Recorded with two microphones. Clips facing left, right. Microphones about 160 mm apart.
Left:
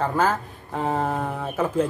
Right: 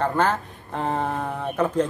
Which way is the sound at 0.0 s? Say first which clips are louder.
Even; 5° left (ahead or behind).